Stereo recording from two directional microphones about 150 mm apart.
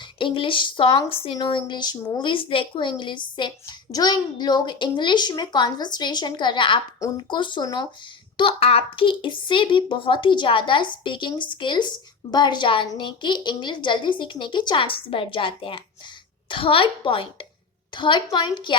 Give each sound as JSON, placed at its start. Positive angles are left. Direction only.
{"t": 0.0, "sound": "a woman's voice", "side_deg": 35}
{"t": 8.4, "sound": "a woman's voice", "side_deg": 40}